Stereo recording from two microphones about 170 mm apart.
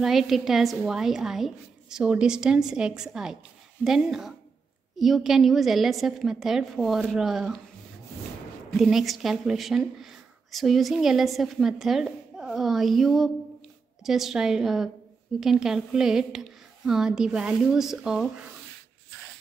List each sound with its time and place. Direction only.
0.0 s speech: centre (ahead or behind)
8.6 s speech: centre (ahead or behind)